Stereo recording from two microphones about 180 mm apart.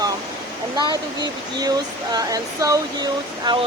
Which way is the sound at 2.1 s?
20° right (ahead or behind).